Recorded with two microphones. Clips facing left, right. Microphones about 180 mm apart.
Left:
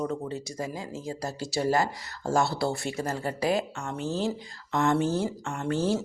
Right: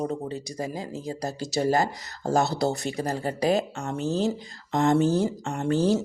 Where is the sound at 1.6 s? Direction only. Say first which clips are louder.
Right 2 dB; 40° right (ahead or behind).